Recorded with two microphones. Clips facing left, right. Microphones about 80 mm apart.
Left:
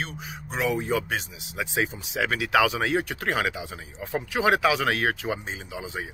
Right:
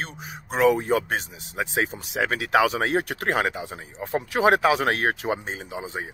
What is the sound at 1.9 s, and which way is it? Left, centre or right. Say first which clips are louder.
Speech: right 2 dB; right.